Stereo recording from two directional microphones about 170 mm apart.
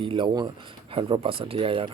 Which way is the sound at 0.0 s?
30° right (ahead or behind).